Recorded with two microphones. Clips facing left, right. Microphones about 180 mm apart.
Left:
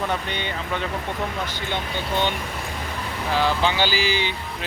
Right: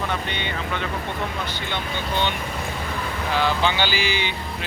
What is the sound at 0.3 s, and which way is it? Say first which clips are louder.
Speech: even; 40° left (ahead or behind).